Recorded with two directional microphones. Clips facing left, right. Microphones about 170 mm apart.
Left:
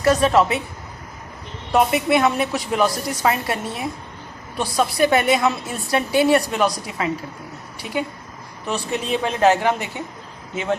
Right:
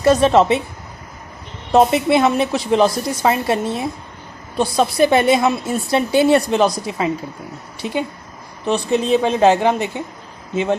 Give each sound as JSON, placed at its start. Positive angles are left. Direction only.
{"t": 0.0, "sound": "a woman's voice", "side_deg": -25}
{"t": 1.7, "sound": "a woman's voice", "side_deg": -30}